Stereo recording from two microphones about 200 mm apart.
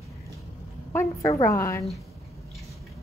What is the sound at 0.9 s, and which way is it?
Speech, 15° left (ahead or behind).